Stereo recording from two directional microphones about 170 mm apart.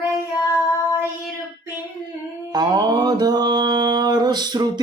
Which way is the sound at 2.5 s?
25° right (ahead or behind).